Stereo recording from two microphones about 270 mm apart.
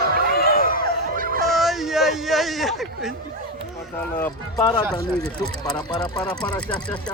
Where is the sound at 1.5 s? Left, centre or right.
Centre.